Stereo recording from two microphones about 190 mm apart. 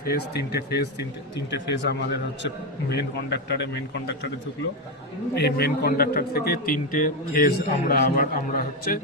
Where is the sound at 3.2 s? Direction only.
60° left (ahead or behind).